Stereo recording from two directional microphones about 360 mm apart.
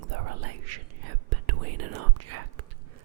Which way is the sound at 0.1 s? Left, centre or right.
Right.